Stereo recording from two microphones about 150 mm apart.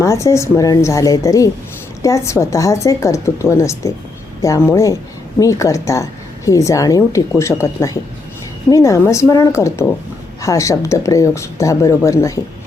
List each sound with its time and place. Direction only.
0.0 s a woman's voice: 20° left (ahead or behind)